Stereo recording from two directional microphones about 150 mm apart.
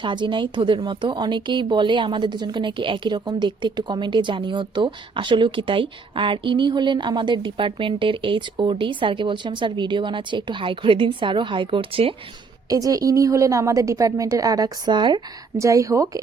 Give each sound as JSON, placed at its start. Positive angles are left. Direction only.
{"t": 0.0, "sound": "speech", "side_deg": -30}
{"t": 12.6, "sound": "a woman's voice", "side_deg": -25}